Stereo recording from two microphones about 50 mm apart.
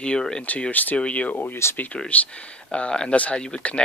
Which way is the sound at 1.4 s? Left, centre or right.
Left.